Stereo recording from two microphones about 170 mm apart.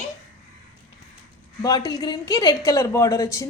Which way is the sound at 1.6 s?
20° left (ahead or behind).